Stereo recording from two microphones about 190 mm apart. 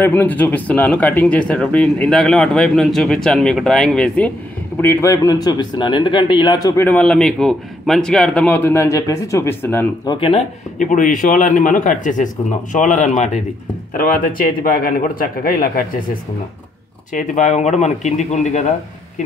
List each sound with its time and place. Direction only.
0.0 s a man's voice: 10° left (ahead or behind)
6.8 s a man's voice: 5° left (ahead or behind)
10.2 s speech: 35° left (ahead or behind)
17.1 s speech: 40° left (ahead or behind)